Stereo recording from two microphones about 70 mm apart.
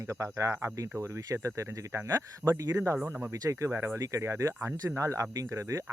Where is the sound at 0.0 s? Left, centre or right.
Right.